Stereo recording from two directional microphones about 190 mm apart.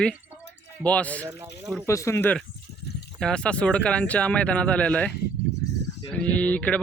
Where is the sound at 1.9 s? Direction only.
15° left (ahead or behind).